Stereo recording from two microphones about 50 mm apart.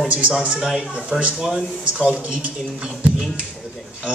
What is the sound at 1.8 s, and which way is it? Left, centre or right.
Speech, right.